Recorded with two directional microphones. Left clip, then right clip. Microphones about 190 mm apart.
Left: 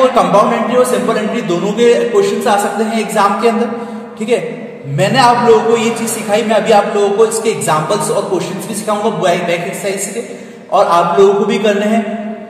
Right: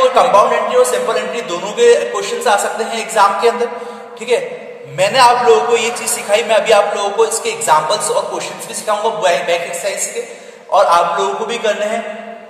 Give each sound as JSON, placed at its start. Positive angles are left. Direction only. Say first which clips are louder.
{"t": 0.0, "sound": "a man's voice", "louder": "even", "side_deg": -10}